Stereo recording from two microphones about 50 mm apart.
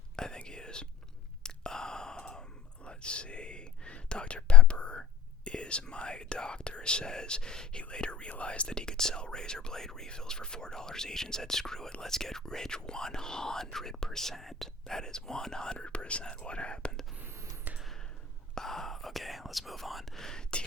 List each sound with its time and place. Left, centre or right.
0.2 s whispering: centre
1.5 s sigh: centre
2.8 s whispering: left
5.5 s speech: left
17.7 s a sound: right
18.5 s speech: centre